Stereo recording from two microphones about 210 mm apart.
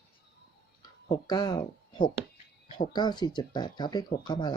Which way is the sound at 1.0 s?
20° left (ahead or behind).